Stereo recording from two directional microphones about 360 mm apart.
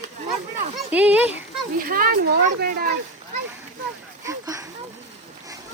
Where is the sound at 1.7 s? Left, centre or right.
Right.